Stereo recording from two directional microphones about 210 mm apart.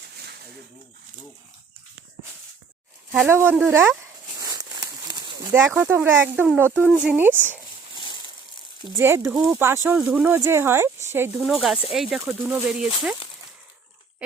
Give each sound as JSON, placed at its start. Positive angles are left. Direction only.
{"t": 3.2, "sound": "speech", "side_deg": -10}
{"t": 4.4, "sound": "a sound", "side_deg": -15}
{"t": 5.5, "sound": "speech", "side_deg": -10}
{"t": 9.0, "sound": "speech", "side_deg": -10}
{"t": 9.3, "sound": "speech", "side_deg": 0}
{"t": 9.6, "sound": "speech", "side_deg": -10}
{"t": 12.2, "sound": "speech", "side_deg": -10}